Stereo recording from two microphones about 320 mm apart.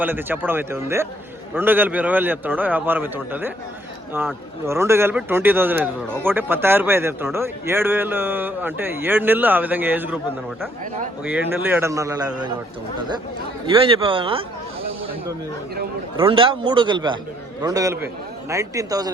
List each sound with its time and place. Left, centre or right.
0.0 s a man's voice: centre
11.2 s speech: centre
13.7 s speech: centre
16.1 s speech: centre